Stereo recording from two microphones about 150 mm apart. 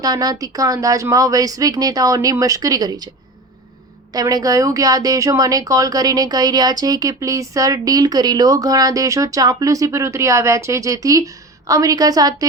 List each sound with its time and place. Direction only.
0.0 s speech: 25° right (ahead or behind)
4.1 s speech: 25° right (ahead or behind)